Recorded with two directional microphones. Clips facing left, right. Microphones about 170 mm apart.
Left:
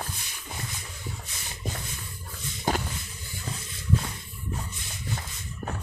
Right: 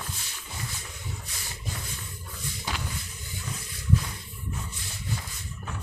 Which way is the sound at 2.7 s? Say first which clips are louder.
Left 9 dB; 50° left (ahead or behind).